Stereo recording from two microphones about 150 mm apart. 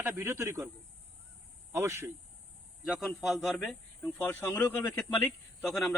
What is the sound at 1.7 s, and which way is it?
Speech, 15° right (ahead or behind).